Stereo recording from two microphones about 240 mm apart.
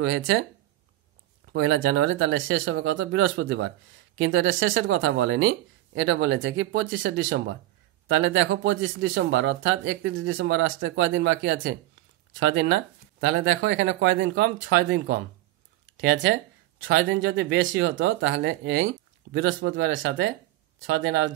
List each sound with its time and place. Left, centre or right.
0.0 s speech: right
1.5 s speech: right